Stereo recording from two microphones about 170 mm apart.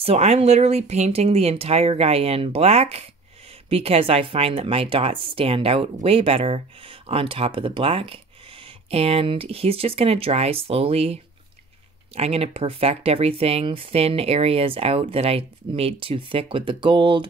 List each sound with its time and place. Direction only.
0.0 s speech: 35° right (ahead or behind)
12.2 s speech: 35° right (ahead or behind)